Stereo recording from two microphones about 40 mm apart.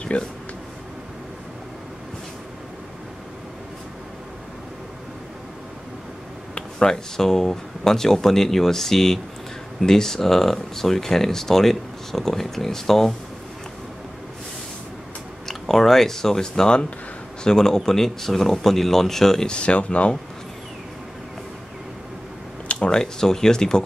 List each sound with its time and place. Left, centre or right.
0.1 s speech: left
6.8 s speech: centre
15.4 s speech: centre
19.5 s speech: left
22.8 s speech: centre